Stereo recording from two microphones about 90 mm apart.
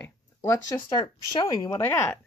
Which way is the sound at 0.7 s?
50° left (ahead or behind).